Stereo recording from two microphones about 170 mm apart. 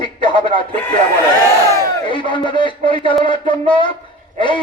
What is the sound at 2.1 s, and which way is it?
A man's voice, 30° left (ahead or behind).